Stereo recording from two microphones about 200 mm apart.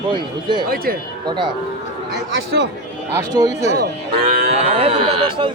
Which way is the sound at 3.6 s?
55° right (ahead or behind).